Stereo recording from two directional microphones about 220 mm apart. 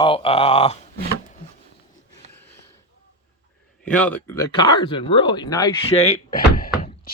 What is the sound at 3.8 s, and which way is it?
Speech, 5° left (ahead or behind).